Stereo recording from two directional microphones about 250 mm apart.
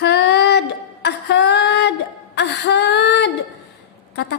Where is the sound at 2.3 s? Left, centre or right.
Left.